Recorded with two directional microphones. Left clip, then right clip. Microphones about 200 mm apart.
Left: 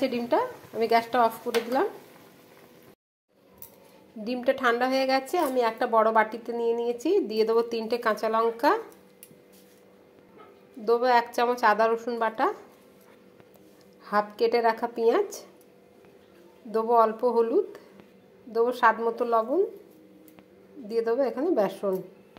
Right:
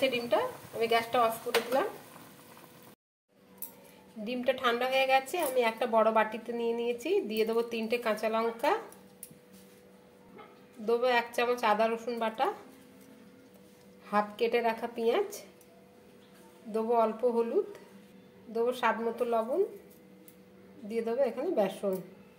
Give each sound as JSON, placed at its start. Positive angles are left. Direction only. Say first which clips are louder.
{"t": 0.1, "sound": "a woman's voice", "louder": "left 4 dB", "side_deg": 40}
{"t": 4.2, "sound": "a woman's voice", "louder": "left 5 dB", "side_deg": 40}
{"t": 10.9, "sound": "a woman's voice", "louder": "left 6 dB", "side_deg": 40}
{"t": 14.0, "sound": "a woman's voice", "louder": "left 5 dB", "side_deg": 40}
{"t": 16.7, "sound": "a woman's voice", "louder": "left 6 dB", "side_deg": 40}
{"t": 20.9, "sound": "a woman's voice", "louder": "left 5 dB", "side_deg": 40}